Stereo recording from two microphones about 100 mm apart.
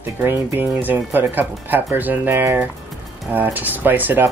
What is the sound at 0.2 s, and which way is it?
Speech, 20° right (ahead or behind).